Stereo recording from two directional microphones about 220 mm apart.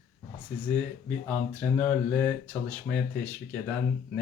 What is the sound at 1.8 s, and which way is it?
A woman's voice, 5° left (ahead or behind).